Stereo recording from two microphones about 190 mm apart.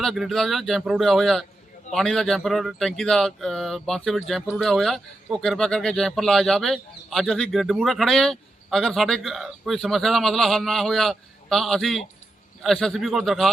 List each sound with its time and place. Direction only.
0.0 s speech: centre (ahead or behind)